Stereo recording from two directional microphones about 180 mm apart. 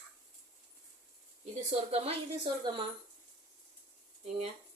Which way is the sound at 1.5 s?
35° right (ahead or behind).